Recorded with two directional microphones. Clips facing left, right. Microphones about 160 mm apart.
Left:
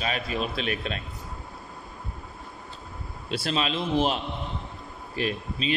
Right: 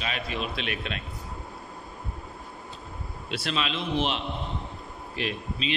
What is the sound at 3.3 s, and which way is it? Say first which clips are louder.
Speech: left 3 dB; 35° left (ahead or behind).